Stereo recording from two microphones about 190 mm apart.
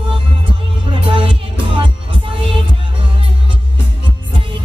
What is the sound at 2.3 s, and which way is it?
Music, 30° right (ahead or behind).